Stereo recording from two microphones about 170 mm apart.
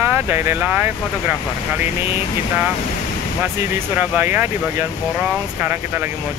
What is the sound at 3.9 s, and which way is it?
Speech, 10° right (ahead or behind).